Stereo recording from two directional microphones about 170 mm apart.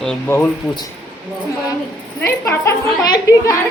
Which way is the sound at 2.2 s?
15° left (ahead or behind).